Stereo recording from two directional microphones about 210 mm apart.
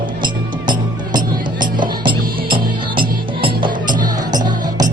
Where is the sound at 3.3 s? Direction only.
25° right (ahead or behind).